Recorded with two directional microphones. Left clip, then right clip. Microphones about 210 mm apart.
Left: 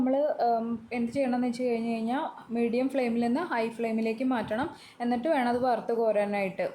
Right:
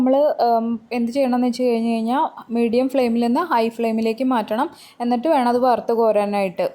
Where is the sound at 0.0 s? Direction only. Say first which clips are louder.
Right 10 dB; 35° right (ahead or behind).